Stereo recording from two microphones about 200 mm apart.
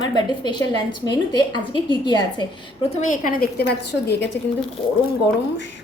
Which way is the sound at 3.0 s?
40° left (ahead or behind).